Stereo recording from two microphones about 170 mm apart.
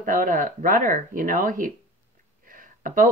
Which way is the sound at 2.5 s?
50° right (ahead or behind).